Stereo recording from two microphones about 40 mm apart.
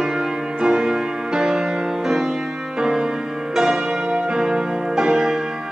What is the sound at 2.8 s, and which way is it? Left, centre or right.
Music, centre.